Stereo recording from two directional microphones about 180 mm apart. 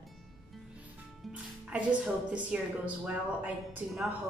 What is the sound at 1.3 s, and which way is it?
Speech, 5° right (ahead or behind).